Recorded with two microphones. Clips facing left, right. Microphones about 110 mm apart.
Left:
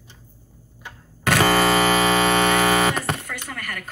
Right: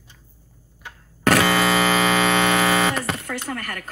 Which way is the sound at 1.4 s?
45° left (ahead or behind).